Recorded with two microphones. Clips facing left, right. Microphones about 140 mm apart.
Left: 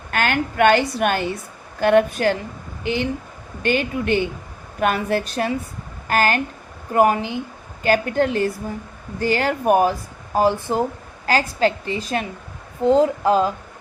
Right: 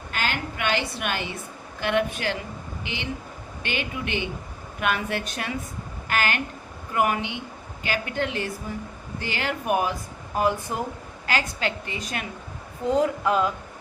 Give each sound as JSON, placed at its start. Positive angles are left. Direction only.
{"t": 0.1, "sound": "a woman's voice", "side_deg": 55}